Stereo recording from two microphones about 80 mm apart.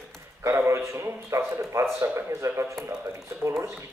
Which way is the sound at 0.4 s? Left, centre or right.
Right.